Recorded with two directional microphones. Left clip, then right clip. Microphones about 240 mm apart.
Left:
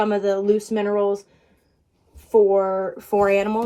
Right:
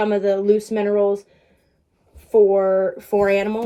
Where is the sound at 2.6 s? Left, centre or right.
Left.